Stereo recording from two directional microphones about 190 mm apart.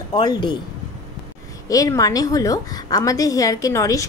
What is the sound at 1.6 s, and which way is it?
A woman's voice, 20° left (ahead or behind).